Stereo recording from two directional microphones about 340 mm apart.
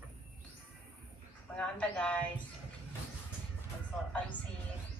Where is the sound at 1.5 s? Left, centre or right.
Centre.